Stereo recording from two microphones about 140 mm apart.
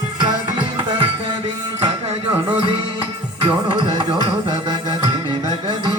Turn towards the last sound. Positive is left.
turn(degrees=-40)  # may be behind; listen again after turning